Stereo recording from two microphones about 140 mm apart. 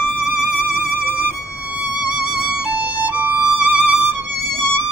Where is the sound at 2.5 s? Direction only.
20° left (ahead or behind).